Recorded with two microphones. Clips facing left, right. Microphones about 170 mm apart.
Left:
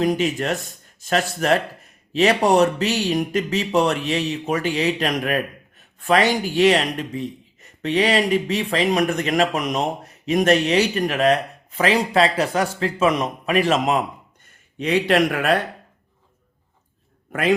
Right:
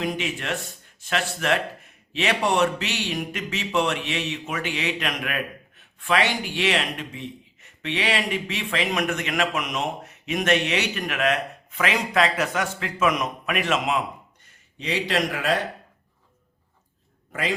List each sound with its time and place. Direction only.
0.0 s speech: 40° left (ahead or behind)
14.4 s speech: 55° left (ahead or behind)